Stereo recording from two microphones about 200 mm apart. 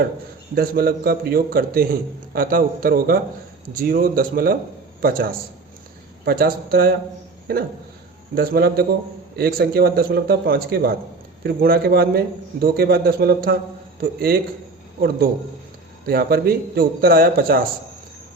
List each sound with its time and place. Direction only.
0.5 s a man's voice: 50° right (ahead or behind)
16.0 s a man's voice: 50° right (ahead or behind)